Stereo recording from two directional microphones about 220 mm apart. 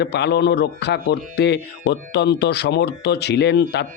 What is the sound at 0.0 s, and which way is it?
Speech, 50° left (ahead or behind).